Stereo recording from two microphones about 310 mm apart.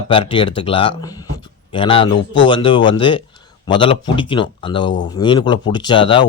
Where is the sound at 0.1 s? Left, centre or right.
Centre.